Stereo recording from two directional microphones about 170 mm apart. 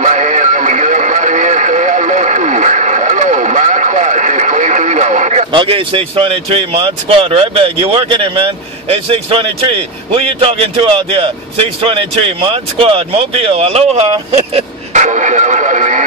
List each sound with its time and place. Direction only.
0.0 s radio: 45° right (ahead or behind)
5.5 s a man's voice: 30° right (ahead or behind); by 16.0 s 45° right (ahead or behind)